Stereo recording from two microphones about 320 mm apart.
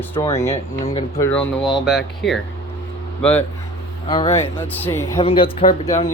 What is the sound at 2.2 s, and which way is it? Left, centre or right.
Speech, left.